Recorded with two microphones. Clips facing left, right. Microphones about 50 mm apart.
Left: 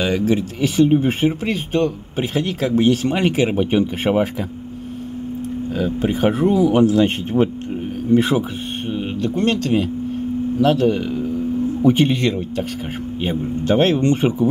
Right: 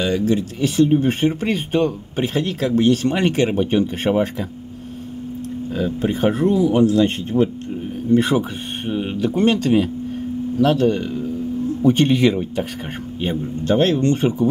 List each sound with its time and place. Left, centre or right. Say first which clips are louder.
0.2 s speech: left 1 dB; centre
5.9 s speech: left 1 dB; centre
6.7 s speech: left 1 dB; left
8.1 s speech: even; centre
12.1 s speech: right 3 dB; centre
13.2 s speech: left 1 dB; centre
13.7 s speech: left 1 dB; left